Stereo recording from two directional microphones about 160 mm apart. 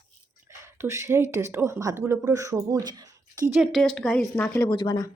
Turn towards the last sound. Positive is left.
turn(degrees=25)  # may be behind; listen again after turning